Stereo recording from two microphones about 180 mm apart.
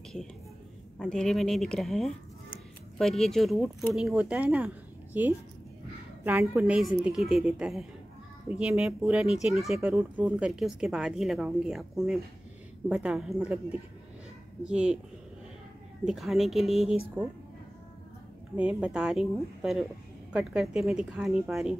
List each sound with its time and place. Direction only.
0.9 s a woman's voice: 5° left (ahead or behind)
16.1 s a woman's voice: centre (ahead or behind)
18.6 s a woman's voice: 5° right (ahead or behind)